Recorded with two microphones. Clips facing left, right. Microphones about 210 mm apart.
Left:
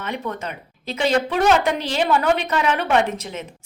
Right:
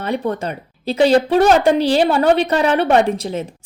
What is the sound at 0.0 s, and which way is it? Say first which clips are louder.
Speech: right 7 dB; 35° right (ahead or behind).